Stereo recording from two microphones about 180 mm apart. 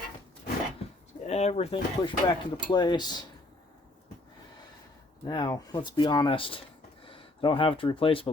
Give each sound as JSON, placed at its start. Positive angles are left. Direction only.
{"t": 1.3, "sound": "speech", "side_deg": 35}
{"t": 5.2, "sound": "speech", "side_deg": 20}